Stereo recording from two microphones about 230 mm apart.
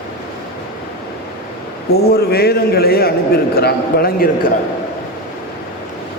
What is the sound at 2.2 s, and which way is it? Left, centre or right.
A man's voice, left.